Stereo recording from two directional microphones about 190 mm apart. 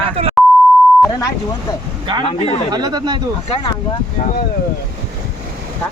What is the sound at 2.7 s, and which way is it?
Speech, 20° right (ahead or behind).